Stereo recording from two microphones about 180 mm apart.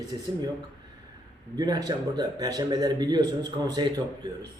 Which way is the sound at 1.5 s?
20° right (ahead or behind).